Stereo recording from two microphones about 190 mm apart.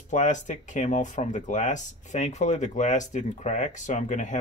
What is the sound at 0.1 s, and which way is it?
Speech, 40° left (ahead or behind).